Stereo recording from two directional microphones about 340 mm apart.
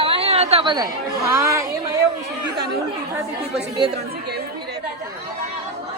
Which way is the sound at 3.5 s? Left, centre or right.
Centre.